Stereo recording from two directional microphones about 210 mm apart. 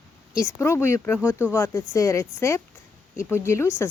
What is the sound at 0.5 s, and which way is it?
Speech, 10° left (ahead or behind).